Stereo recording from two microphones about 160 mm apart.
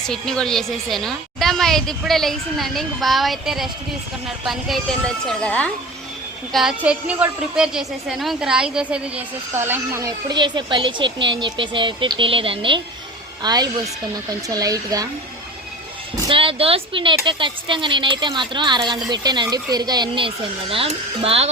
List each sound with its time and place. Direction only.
0.1 s a woman's voice: 5° left (ahead or behind)
6.5 s a woman's voice: 5° right (ahead or behind); by 15.0 s 20° right (ahead or behind)
16.2 s speech: 35° right (ahead or behind)